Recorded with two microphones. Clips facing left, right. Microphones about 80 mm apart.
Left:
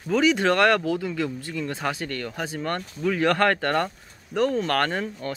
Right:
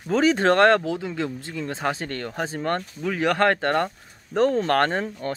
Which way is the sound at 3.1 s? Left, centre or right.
Centre.